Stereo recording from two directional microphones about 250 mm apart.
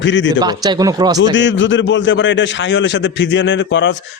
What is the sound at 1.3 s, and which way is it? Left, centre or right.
A man's voice, left.